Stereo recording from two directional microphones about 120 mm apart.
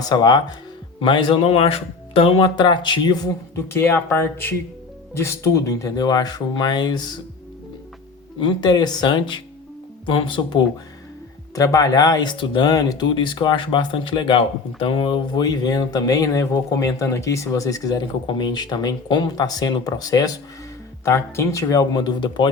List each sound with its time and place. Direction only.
0.0 s speech: 30° left (ahead or behind)
1.0 s speech: 45° left (ahead or behind)
2.6 s speech: 40° left (ahead or behind)
3.5 s speech: 20° left (ahead or behind); by 7.2 s 35° left (ahead or behind)
8.4 s speech: 40° left (ahead or behind)
11.5 s speech: 30° left (ahead or behind)